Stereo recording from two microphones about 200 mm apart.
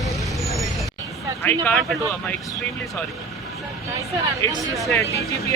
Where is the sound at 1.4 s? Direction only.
5° left (ahead or behind).